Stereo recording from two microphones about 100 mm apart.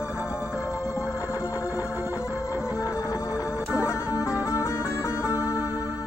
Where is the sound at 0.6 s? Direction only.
30° left (ahead or behind).